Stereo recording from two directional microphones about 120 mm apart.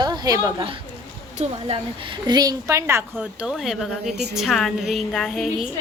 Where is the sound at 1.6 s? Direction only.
45° right (ahead or behind); by 3.0 s 25° right (ahead or behind).